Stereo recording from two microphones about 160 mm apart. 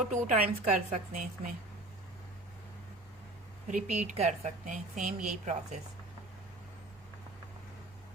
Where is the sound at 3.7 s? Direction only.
50° right (ahead or behind).